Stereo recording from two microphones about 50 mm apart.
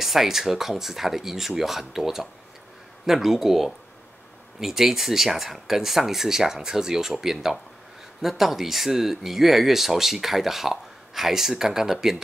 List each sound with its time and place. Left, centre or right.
0.0 s speech: centre